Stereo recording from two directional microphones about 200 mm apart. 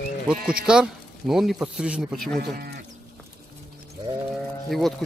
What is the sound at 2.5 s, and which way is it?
Livestock, 50° right (ahead or behind).